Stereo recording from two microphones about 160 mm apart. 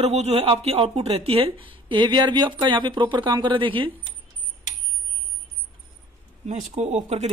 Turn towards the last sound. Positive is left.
turn(degrees=-45)  # may be behind; listen again after turning